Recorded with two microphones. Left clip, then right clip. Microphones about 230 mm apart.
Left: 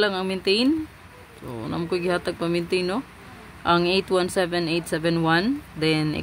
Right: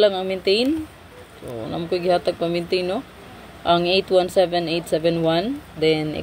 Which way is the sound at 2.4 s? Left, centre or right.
Left.